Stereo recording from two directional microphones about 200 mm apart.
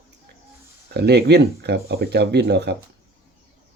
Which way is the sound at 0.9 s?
55° right (ahead or behind).